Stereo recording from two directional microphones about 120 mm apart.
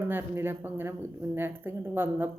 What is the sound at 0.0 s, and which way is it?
A woman's voice, 20° right (ahead or behind).